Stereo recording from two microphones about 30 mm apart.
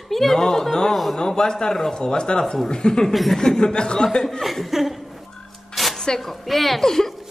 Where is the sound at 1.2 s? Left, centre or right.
Left.